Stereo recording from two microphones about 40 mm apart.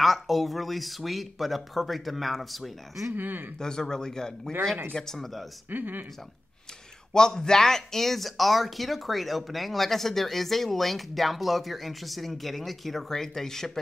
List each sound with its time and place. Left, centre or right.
0.0 s speech: centre
3.2 s speech: right
3.5 s speech: centre
5.7 s speech: right
7.2 s speech: centre